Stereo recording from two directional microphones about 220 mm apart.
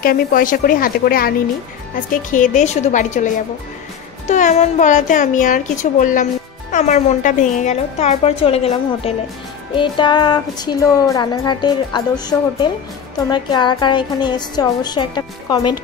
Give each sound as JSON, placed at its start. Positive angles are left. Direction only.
{"t": 0.0, "sound": "a child's voice", "side_deg": 40}
{"t": 2.3, "sound": "a child's voice", "side_deg": 35}
{"t": 4.3, "sound": "a child's voice", "side_deg": 35}